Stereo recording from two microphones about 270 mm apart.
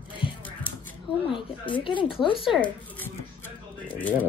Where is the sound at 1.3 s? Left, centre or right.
Centre.